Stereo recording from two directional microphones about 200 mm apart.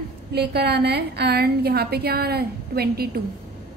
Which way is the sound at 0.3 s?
55° right (ahead or behind).